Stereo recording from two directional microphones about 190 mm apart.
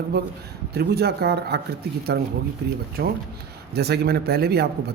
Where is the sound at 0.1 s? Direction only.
55° right (ahead or behind).